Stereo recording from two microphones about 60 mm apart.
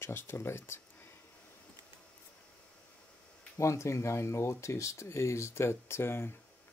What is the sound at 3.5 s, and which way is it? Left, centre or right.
Speech, left.